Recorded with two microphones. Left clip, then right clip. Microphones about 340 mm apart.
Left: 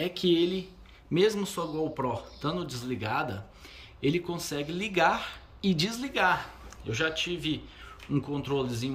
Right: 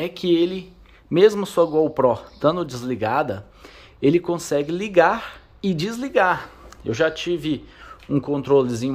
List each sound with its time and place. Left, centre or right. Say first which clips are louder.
0.0 s speech: right 6 dB; centre